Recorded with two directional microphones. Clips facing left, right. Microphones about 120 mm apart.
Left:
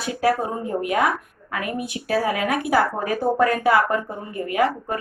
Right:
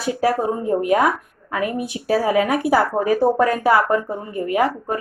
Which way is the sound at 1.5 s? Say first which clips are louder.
Right 4 dB; 30° right (ahead or behind).